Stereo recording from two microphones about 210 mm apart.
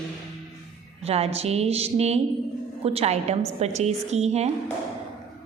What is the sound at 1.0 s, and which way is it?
A woman's voice, 30° right (ahead or behind).